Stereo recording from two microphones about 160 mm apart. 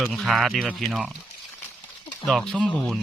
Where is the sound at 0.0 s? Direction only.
Centre (ahead or behind).